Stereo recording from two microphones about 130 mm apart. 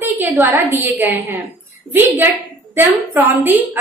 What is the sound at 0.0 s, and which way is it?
A woman's voice, 15° right (ahead or behind).